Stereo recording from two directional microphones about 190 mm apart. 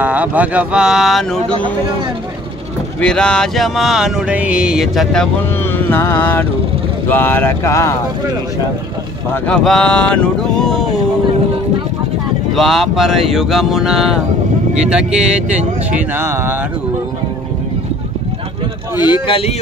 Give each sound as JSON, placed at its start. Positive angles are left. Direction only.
{"t": 0.0, "sound": "speech", "side_deg": -10}
{"t": 3.0, "sound": "mantra", "side_deg": 5}
{"t": 5.9, "sound": "speech", "side_deg": 10}
{"t": 9.3, "sound": "mantra", "side_deg": 5}
{"t": 12.5, "sound": "mantra", "side_deg": 0}
{"t": 16.2, "sound": "speech", "side_deg": -10}
{"t": 18.9, "sound": "speech", "side_deg": 25}